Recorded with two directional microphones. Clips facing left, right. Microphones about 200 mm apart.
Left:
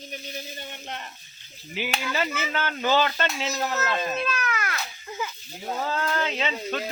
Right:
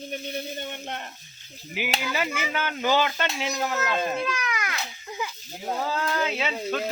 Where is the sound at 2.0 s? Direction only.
10° right (ahead or behind).